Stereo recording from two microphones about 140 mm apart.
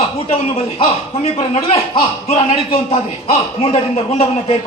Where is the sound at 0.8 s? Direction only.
50° left (ahead or behind).